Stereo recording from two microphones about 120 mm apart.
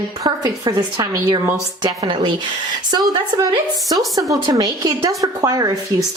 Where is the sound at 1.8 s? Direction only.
40° right (ahead or behind).